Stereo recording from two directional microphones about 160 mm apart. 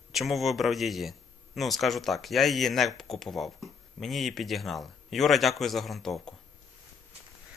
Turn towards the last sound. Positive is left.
turn(degrees=0)  # may be behind; listen again after turning